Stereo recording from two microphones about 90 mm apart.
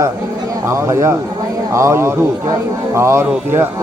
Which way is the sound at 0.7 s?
30° right (ahead or behind).